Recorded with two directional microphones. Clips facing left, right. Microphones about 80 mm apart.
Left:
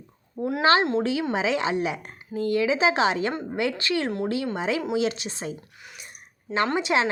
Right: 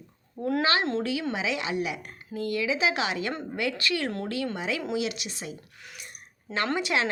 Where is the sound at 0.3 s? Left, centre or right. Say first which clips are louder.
Even; centre.